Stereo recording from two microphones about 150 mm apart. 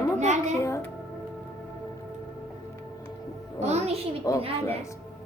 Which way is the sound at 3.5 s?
45° right (ahead or behind).